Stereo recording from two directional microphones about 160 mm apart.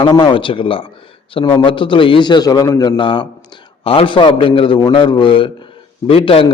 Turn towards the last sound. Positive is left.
turn(degrees=35)  # may be behind; listen again after turning